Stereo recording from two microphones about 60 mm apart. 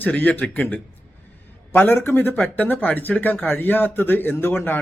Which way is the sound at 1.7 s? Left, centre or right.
Left.